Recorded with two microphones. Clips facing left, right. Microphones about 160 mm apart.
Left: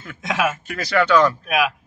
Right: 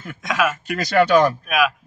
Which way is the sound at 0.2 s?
25° left (ahead or behind).